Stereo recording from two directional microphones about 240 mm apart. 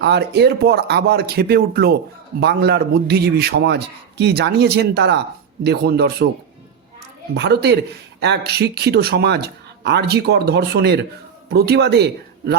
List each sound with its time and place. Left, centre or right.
0.0 s a man's voice: right
7.3 s a man's voice: right